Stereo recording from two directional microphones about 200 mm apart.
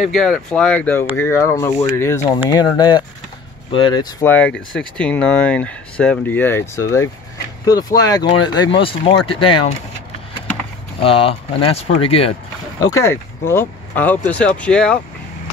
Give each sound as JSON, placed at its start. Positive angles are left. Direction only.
{"t": 0.0, "sound": "speech", "side_deg": 0}
{"t": 4.3, "sound": "speech", "side_deg": 5}
{"t": 11.0, "sound": "speech", "side_deg": 30}
{"t": 12.9, "sound": "speech", "side_deg": 15}